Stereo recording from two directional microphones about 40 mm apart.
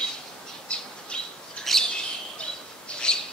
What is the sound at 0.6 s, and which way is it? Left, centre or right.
Bird, left.